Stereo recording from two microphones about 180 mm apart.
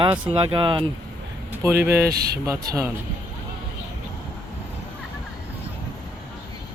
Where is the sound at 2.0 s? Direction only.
60° right (ahead or behind).